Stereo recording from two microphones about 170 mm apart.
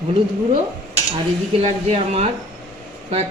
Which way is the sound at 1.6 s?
40° right (ahead or behind).